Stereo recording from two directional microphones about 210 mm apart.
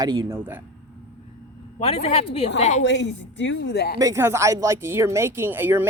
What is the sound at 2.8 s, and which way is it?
A woman's voice, 60° left (ahead or behind).